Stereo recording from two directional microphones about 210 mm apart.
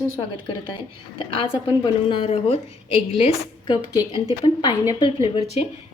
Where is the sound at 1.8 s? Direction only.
25° left (ahead or behind).